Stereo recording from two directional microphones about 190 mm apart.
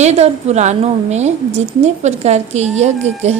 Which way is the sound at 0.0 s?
35° right (ahead or behind).